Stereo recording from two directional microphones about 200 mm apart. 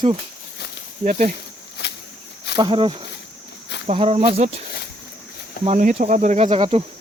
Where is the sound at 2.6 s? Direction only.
25° right (ahead or behind).